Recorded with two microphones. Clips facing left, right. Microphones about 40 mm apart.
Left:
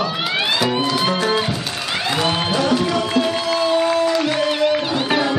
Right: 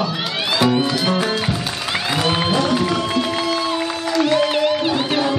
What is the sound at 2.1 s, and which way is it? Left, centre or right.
Music, centre.